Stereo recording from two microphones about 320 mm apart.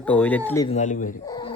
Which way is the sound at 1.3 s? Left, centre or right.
Centre.